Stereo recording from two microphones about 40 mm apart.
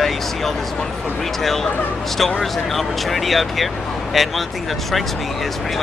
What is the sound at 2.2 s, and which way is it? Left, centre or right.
Speech, centre.